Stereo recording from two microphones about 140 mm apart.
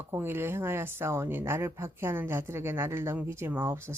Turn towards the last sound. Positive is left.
turn(degrees=-15)  # may be behind; listen again after turning